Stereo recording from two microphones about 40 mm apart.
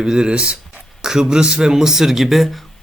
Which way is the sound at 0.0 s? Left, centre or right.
Centre.